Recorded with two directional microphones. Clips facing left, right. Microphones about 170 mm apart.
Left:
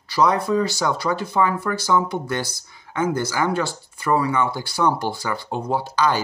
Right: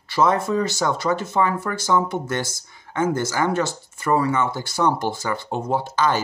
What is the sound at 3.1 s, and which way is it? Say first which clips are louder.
Speech: even; 20° right (ahead or behind).